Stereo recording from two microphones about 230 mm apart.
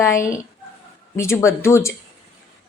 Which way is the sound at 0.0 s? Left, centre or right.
Centre.